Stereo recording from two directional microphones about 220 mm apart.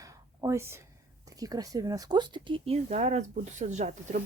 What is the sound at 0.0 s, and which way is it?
Speech, 15° right (ahead or behind).